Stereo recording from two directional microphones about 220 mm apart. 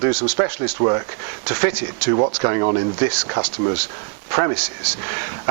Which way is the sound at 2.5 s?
20° right (ahead or behind).